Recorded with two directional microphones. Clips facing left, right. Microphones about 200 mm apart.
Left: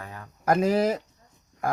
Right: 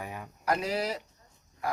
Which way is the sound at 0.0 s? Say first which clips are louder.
Right 1 dB; 15° right (ahead or behind).